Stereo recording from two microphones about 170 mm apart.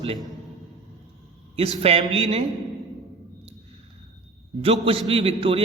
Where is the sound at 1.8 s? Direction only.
35° right (ahead or behind).